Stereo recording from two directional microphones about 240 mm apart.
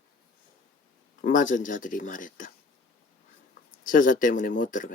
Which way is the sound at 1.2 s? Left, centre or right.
Left.